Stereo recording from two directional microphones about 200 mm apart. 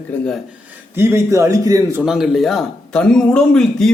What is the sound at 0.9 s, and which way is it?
A man's voice, 10° right (ahead or behind).